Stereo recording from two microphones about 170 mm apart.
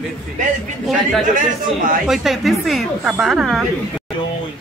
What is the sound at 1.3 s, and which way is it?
Speech, 50° right (ahead or behind).